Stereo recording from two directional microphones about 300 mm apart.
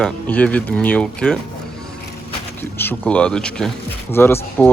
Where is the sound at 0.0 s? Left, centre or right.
Centre.